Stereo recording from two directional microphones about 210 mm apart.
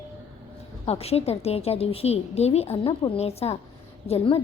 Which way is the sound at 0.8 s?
30° left (ahead or behind).